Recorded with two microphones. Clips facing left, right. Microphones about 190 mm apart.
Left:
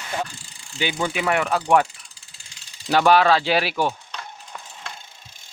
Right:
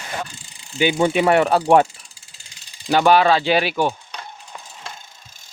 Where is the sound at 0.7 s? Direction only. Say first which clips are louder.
Right 7 dB; 15° right (ahead or behind).